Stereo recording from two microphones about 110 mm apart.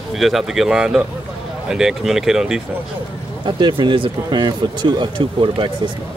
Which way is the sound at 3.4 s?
45° right (ahead or behind).